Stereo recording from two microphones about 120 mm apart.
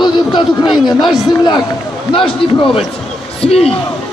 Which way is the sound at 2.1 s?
45° left (ahead or behind).